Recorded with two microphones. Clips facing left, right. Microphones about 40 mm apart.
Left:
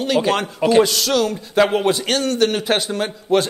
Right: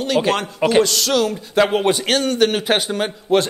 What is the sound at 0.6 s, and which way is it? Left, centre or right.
Speech, centre.